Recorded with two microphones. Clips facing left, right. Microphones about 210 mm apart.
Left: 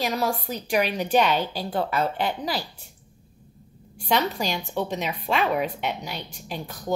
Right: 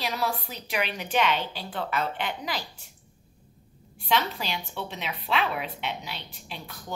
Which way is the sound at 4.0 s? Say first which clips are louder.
Left 4 dB; 45° left (ahead or behind).